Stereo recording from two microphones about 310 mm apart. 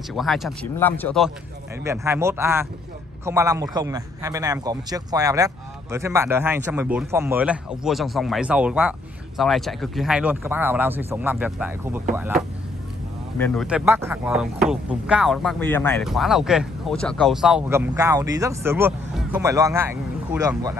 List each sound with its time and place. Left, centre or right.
0.1 s speech: centre
1.9 s a man's voice: centre